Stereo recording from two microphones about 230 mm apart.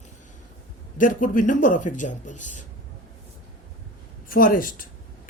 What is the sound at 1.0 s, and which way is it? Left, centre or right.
Speech, left.